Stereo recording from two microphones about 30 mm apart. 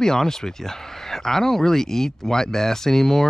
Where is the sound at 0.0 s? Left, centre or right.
Centre.